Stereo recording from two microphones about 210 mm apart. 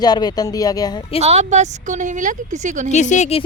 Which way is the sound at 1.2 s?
30° right (ahead or behind).